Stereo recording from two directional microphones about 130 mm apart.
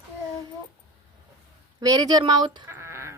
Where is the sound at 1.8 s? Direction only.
30° right (ahead or behind).